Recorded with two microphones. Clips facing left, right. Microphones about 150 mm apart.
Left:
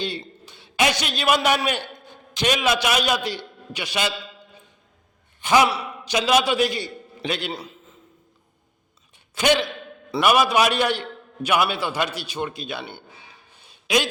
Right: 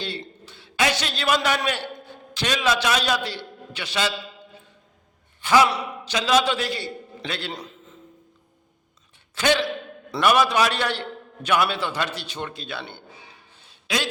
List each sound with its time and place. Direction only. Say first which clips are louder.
0.0 s a man's voice: left 3 dB; 15° left (ahead or behind)
5.4 s sigh: even; 20° left (ahead or behind)
5.6 s a sound: even; 5° left (ahead or behind)
6.1 s a man's voice: left 2 dB; 15° left (ahead or behind)
9.3 s a man's voice: left 1 dB; 15° left (ahead or behind)
13.6 s a sound: left 5 dB; 15° left (ahead or behind)